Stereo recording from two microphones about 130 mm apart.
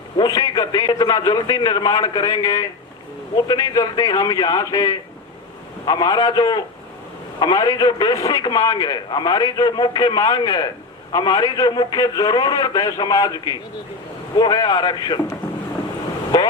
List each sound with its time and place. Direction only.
0.2 s a man's voice: 35° left (ahead or behind)